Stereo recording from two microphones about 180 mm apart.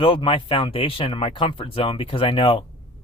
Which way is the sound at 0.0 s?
30° left (ahead or behind).